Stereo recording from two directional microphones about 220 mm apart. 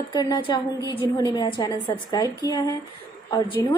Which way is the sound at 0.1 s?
20° left (ahead or behind).